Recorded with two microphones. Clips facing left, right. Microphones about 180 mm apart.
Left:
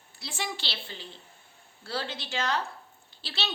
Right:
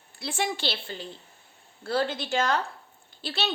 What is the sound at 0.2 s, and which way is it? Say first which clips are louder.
A woman's voice: right 7 dB; 55° right (ahead or behind).